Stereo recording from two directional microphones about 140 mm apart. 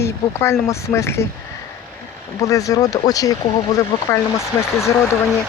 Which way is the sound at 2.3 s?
25° left (ahead or behind).